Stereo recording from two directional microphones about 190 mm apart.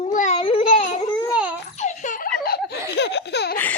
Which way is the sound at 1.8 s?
40° left (ahead or behind).